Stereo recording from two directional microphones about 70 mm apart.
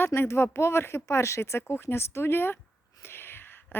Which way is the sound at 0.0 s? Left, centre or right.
Left.